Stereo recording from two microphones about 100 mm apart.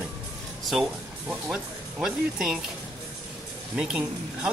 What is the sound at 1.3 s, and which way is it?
Speech, 10° right (ahead or behind).